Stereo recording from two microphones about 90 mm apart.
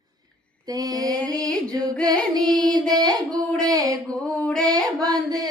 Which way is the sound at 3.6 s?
40° right (ahead or behind).